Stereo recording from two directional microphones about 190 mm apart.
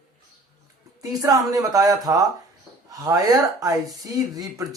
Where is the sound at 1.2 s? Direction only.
20° right (ahead or behind).